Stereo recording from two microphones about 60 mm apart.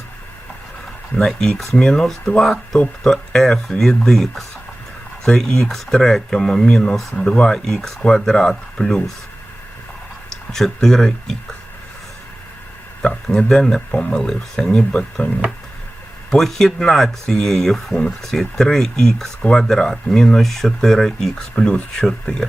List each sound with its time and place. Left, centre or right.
1.3 s speech: centre
10.5 s speech: centre
13.0 s speech: centre
14.9 s speech: left
16.3 s speech: centre
21.5 s speech: centre